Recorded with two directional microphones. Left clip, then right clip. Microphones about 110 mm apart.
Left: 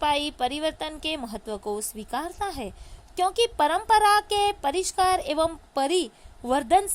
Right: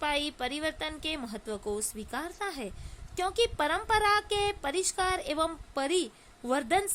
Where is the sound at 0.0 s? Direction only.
30° left (ahead or behind).